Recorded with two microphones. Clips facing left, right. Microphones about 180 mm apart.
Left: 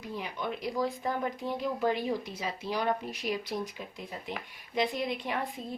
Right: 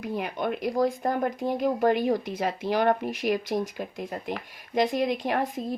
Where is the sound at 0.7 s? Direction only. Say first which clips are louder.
Right 6 dB; 45° right (ahead or behind).